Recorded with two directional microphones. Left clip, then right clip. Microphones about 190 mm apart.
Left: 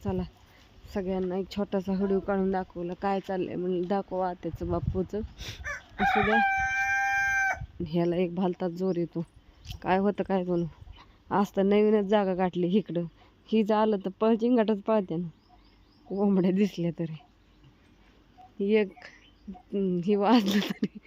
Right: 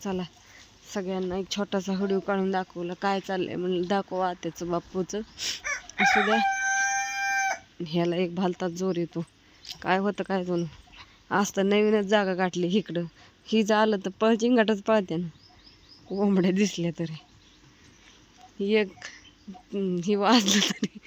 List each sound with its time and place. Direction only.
0.0 s speech: centre (ahead or behind)
6.1 s crowing: 45° right (ahead or behind)
7.3 s speech: centre (ahead or behind)
18.6 s speech: 5° left (ahead or behind)